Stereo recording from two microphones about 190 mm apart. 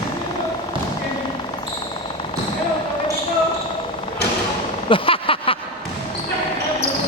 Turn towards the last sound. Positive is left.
turn(degrees=30)  # may be behind; listen again after turning